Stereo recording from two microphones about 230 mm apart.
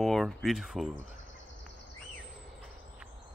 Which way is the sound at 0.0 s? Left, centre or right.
Centre.